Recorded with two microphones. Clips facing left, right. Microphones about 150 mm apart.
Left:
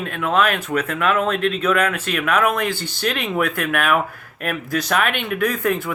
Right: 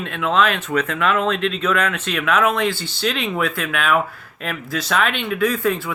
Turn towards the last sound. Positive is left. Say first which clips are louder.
# right 1 dB
turn(degrees=50)  # may be behind; listen again after turning